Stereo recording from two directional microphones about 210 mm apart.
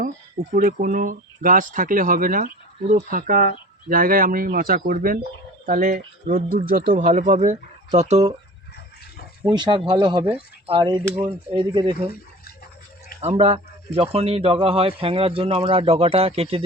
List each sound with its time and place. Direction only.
0.5 s speech: 40° right (ahead or behind)
9.4 s speech: 20° right (ahead or behind)
13.2 s speech: 30° right (ahead or behind)